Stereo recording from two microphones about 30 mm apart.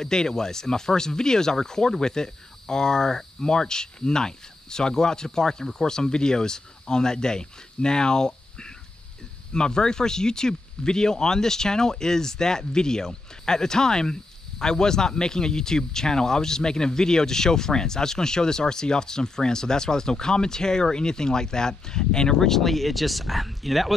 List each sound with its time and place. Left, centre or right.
0.0 s speech: left
22.5 s speech: centre